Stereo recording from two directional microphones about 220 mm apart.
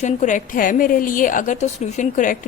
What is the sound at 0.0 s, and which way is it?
A woman's voice, 35° left (ahead or behind).